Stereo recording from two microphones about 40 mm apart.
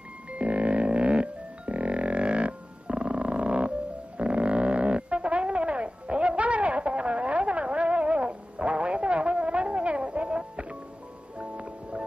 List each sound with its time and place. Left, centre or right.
0.3 s music: right
4.2 s a sound: right
11.3 s music: right